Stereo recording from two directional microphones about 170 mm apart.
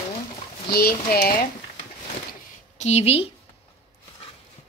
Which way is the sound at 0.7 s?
65° left (ahead or behind).